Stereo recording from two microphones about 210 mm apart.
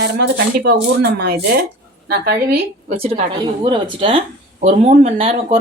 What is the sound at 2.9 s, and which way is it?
Speech, 30° right (ahead or behind).